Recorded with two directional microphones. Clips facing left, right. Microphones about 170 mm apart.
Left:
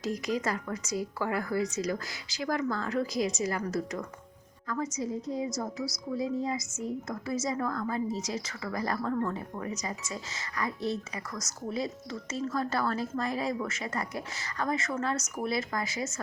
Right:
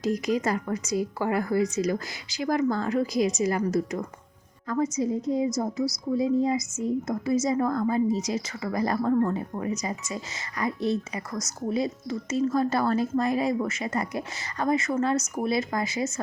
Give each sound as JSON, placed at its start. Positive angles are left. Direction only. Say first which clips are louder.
{"t": 0.3, "sound": "speech", "louder": "right 5 dB", "side_deg": -20}